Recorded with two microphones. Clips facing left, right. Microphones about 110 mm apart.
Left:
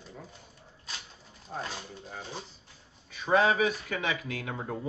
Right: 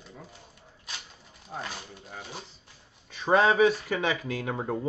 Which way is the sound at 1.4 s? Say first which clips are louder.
Even; 10° right (ahead or behind).